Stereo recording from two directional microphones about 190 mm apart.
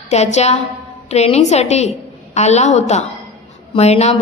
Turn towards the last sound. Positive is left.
turn(degrees=35)  # may be behind; listen again after turning